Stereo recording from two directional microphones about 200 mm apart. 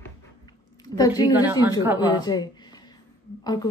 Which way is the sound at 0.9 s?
20° left (ahead or behind).